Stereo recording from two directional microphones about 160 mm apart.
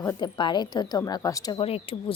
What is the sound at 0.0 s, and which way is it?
Speech, 25° left (ahead or behind).